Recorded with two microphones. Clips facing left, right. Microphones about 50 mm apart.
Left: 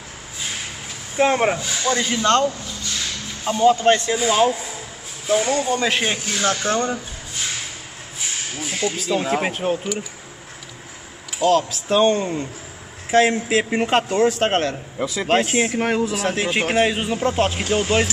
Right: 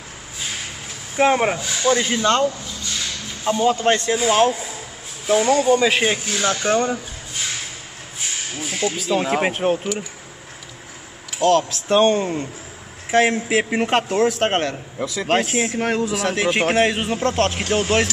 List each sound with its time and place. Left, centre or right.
1.1 s speech: centre
3.4 s speech: centre
8.5 s speech: centre
11.3 s speech: centre